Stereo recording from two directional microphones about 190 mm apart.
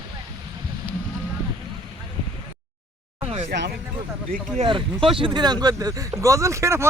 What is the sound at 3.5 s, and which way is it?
Speech, 60° right (ahead or behind).